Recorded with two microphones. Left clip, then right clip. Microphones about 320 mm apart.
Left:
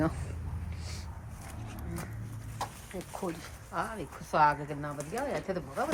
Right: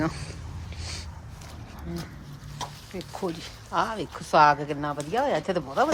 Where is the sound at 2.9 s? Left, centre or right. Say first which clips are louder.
Right 6 dB; centre.